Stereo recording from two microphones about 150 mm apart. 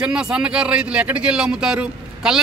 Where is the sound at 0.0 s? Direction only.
5° right (ahead or behind).